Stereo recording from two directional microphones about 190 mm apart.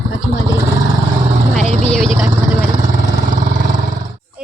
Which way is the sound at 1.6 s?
35° left (ahead or behind).